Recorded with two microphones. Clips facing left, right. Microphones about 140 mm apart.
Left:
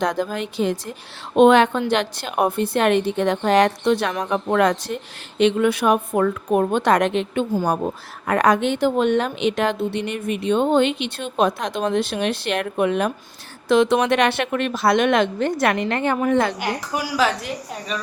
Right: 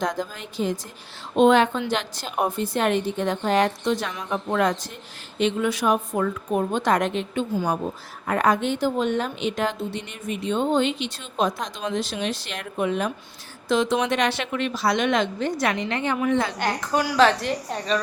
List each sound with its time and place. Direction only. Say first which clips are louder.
0.0 s a woman's voice: left 5 dB; 70° left (ahead or behind); by 16.6 s 50° left (ahead or behind)
16.6 s a woman's voice: right 1 dB; 10° left (ahead or behind)